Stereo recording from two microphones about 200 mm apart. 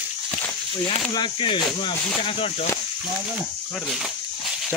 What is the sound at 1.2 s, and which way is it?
Speech, 25° left (ahead or behind).